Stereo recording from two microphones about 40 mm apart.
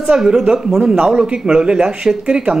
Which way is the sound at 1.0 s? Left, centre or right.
Right.